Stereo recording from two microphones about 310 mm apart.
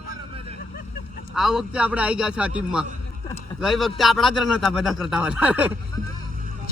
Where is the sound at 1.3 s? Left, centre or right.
Centre.